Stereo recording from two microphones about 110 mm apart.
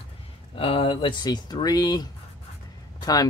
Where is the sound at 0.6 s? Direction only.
55° left (ahead or behind); by 2.0 s 35° left (ahead or behind).